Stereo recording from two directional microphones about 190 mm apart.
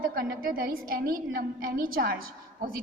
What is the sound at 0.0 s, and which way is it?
A woman's voice, 50° right (ahead or behind).